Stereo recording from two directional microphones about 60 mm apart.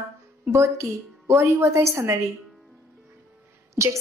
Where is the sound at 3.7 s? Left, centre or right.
Right.